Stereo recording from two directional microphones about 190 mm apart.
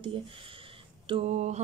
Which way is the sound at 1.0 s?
30° right (ahead or behind).